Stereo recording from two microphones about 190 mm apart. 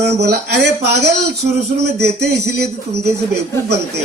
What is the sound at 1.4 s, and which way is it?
Speech, 50° right (ahead or behind).